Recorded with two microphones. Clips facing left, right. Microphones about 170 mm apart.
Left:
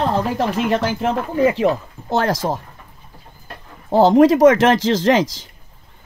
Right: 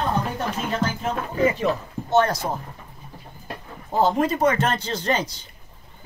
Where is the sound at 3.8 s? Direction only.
90° left.